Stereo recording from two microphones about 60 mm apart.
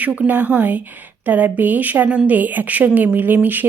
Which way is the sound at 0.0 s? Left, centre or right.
Right.